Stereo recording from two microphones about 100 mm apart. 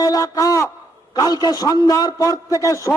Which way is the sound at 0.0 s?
35° left (ahead or behind).